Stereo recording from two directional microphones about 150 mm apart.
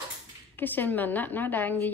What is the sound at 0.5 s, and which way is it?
A woman's voice, 10° left (ahead or behind).